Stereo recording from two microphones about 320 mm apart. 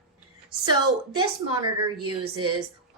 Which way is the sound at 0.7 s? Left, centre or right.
Centre.